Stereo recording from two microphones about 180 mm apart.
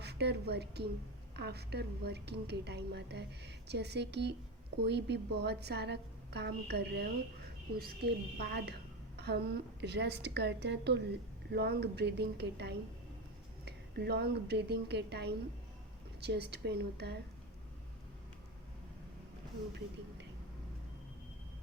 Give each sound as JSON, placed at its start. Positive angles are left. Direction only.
{"t": 0.0, "sound": "a woman's voice", "side_deg": -65}